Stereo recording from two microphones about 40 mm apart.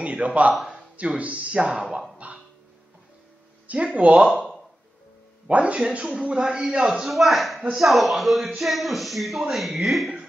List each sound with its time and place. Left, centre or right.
0.0 s a man's voice: right
2.1 s a sound: right
3.6 s speech: right
5.5 s a man's voice: right
7.1 s speech: centre